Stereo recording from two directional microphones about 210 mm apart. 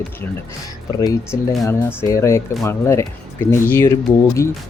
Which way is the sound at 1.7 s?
15° left (ahead or behind).